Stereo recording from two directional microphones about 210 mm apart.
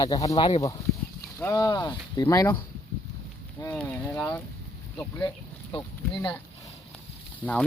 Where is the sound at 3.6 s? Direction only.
10° left (ahead or behind).